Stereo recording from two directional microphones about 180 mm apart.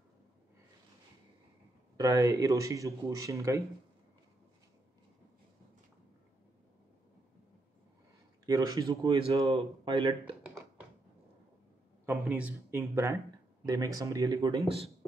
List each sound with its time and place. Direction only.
2.0 s speech: 20° right (ahead or behind)
8.5 s speech: 20° right (ahead or behind)
12.1 s speech: 5° right (ahead or behind)